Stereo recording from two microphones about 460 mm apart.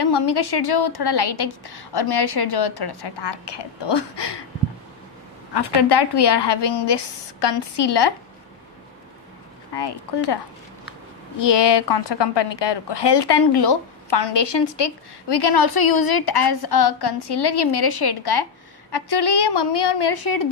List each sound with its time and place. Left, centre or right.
0.0 s a woman's voice: left
5.5 s a woman's voice: left
9.8 s a woman's voice: left